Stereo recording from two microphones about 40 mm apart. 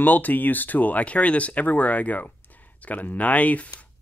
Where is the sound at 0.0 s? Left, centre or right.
Left.